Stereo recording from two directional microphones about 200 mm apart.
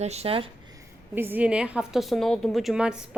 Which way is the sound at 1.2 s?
10° right (ahead or behind).